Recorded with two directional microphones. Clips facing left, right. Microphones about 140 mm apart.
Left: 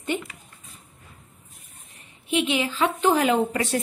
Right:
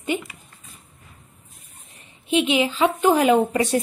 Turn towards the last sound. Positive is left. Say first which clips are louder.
# right 4 dB
turn(degrees=-20)  # may be behind; listen again after turning